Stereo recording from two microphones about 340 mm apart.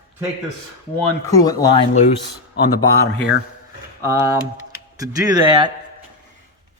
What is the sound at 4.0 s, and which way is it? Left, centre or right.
Speech, centre.